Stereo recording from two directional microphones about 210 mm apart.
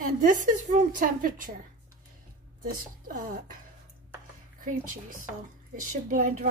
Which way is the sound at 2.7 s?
40° right (ahead or behind).